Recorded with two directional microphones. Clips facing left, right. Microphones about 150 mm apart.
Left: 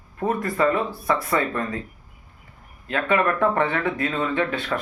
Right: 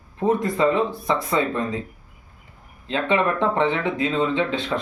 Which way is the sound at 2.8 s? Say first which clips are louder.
Even; 25° right (ahead or behind).